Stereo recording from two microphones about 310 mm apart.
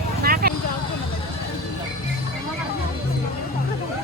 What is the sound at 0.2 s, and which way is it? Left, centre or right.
Vehicle, right.